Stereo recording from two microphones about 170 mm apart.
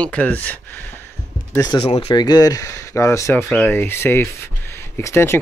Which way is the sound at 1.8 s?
35° left (ahead or behind).